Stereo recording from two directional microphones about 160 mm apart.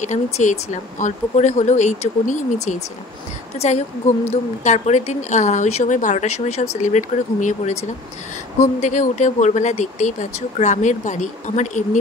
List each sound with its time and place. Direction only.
0.0 s speech: 50° left (ahead or behind)
8.8 s speech: 50° left (ahead or behind)